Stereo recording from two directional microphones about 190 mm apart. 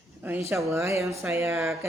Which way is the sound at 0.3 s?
10° right (ahead or behind).